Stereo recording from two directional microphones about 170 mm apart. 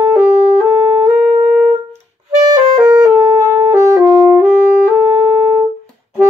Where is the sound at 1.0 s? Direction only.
10° right (ahead or behind).